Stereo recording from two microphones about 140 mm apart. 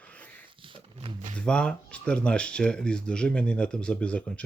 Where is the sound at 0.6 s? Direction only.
40° right (ahead or behind).